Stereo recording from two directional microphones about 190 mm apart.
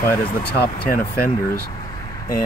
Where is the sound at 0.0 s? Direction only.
15° left (ahead or behind).